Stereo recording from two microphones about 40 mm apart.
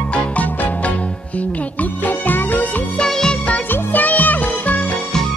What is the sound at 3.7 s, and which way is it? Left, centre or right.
Music, left.